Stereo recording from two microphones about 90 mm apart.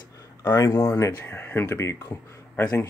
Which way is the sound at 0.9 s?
25° left (ahead or behind).